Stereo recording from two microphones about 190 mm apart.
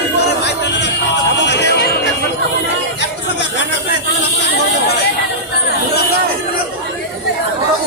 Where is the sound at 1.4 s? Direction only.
65° left (ahead or behind).